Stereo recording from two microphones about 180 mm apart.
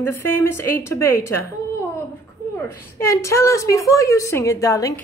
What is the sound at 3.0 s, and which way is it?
A woman's voice, 15° left (ahead or behind).